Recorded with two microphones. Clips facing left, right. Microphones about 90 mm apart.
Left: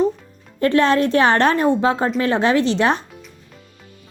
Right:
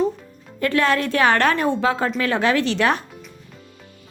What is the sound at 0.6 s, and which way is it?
A woman's voice, 25° left (ahead or behind).